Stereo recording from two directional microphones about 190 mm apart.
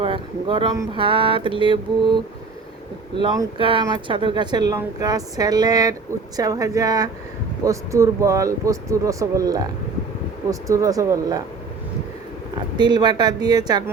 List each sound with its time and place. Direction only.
0.0 s speech: 25° right (ahead or behind)
12.7 s speech: 25° right (ahead or behind)